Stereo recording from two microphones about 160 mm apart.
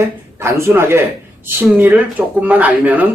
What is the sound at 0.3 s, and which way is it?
Speech, 15° right (ahead or behind).